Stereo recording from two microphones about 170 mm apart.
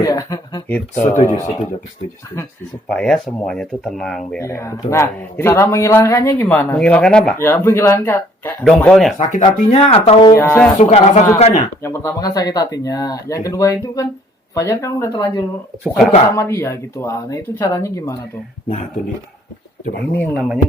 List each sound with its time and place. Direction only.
0.0 s speech: 20° left (ahead or behind)
1.0 s speech: 45° left (ahead or behind)
1.3 s a man's voice: 20° left (ahead or behind)
2.9 s speech: 5° left (ahead or behind)
4.4 s a man's voice: 15° left (ahead or behind)
9.1 s speech: 45° left (ahead or behind)
10.3 s a man's voice: 15° left (ahead or behind)
10.8 s speech: 40° left (ahead or behind)
11.8 s speech: 15° left (ahead or behind)
15.8 s speech: centre (ahead or behind)
16.3 s a man's voice: 15° left (ahead or behind)
20.3 s speech: 5° right (ahead or behind)